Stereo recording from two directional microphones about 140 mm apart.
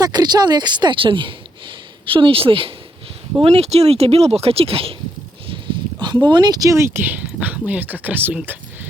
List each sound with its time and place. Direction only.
0.0 s a woman's voice: 30° right (ahead or behind)
6.2 s speech: 30° right (ahead or behind); by 8.5 s 10° right (ahead or behind)